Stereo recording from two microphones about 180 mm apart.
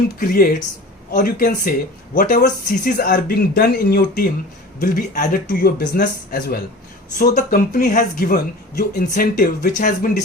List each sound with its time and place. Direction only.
0.2 s speech: 55° left (ahead or behind)